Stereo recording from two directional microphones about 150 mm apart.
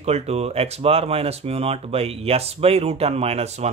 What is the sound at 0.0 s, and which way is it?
Speech, 45° right (ahead or behind).